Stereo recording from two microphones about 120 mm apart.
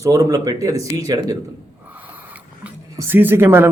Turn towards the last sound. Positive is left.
turn(degrees=-20)  # may be behind; listen again after turning